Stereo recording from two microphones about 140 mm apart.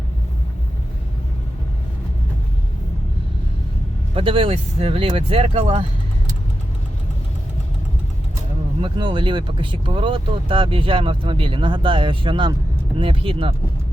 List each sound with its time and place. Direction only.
4.1 s speech: 40° right (ahead or behind)
8.8 s speech: 35° right (ahead or behind)